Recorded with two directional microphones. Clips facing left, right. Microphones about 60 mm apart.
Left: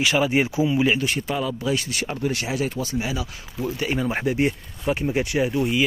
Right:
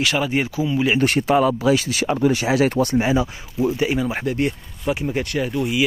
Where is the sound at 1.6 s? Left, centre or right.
Right.